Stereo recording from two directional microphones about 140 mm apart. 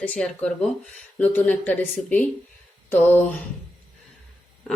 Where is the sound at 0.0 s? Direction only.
10° left (ahead or behind).